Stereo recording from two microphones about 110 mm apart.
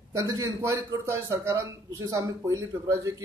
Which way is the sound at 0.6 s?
25° right (ahead or behind).